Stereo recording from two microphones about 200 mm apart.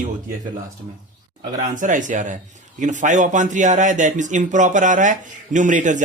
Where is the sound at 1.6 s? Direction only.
40° right (ahead or behind).